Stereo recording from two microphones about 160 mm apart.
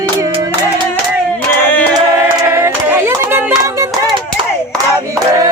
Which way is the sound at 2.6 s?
15° right (ahead or behind).